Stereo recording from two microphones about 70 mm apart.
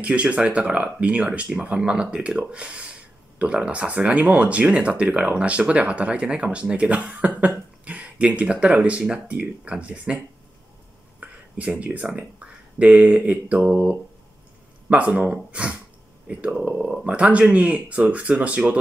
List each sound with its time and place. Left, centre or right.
0.0 s speech: centre